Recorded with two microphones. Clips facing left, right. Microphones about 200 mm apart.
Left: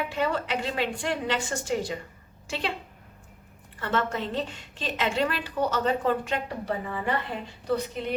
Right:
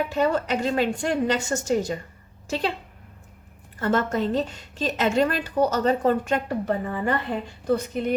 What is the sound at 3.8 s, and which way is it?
A woman's voice, 40° right (ahead or behind).